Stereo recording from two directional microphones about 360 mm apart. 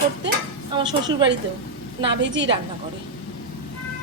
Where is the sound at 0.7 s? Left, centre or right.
Centre.